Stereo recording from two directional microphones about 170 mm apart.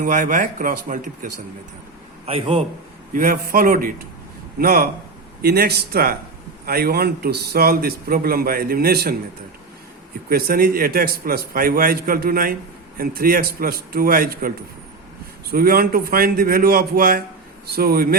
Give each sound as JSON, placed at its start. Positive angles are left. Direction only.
{"t": 0.0, "sound": "speech", "side_deg": -50}
{"t": 2.2, "sound": "a man's voice", "side_deg": -35}
{"t": 3.1, "sound": "a man's voice", "side_deg": -55}
{"t": 10.2, "sound": "a man's voice", "side_deg": -60}